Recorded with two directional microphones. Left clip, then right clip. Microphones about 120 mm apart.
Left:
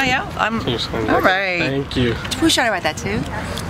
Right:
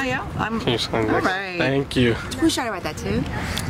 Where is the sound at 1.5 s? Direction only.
40° right (ahead or behind).